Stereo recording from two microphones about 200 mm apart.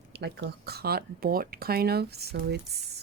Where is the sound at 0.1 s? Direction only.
55° right (ahead or behind).